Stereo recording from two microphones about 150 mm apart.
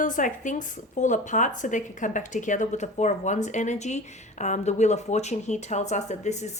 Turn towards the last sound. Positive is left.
turn(degrees=50)  # may be behind; listen again after turning